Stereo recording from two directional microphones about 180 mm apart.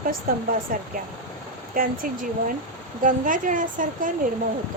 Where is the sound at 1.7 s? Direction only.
50° right (ahead or behind).